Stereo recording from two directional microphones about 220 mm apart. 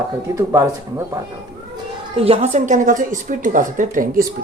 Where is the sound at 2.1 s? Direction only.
25° right (ahead or behind).